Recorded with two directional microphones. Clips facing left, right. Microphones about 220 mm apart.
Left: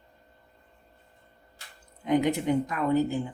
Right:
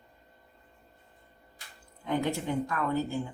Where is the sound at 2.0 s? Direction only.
20° left (ahead or behind).